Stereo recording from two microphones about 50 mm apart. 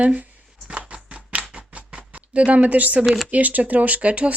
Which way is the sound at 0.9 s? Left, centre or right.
Right.